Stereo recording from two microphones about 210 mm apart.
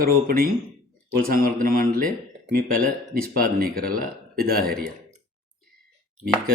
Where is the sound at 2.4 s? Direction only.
45° right (ahead or behind).